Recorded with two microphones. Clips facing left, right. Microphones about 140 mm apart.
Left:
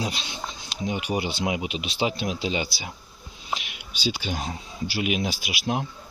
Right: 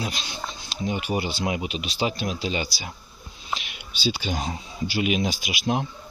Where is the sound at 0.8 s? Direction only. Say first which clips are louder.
Right 1 dB; 10° left (ahead or behind).